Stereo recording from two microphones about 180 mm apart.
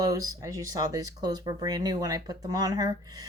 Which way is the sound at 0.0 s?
20° right (ahead or behind).